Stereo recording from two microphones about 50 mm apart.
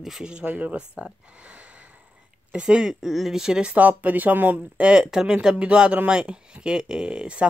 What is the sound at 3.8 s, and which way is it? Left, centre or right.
Speech, right.